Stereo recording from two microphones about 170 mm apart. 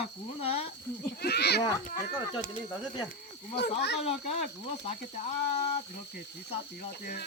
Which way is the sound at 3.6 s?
80° left.